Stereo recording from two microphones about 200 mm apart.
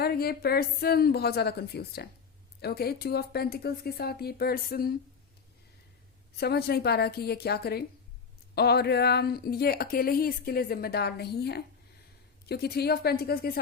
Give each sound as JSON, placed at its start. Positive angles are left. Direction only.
{"t": 0.0, "sound": "a woman's voice", "side_deg": 50}
{"t": 6.4, "sound": "a woman's voice", "side_deg": 55}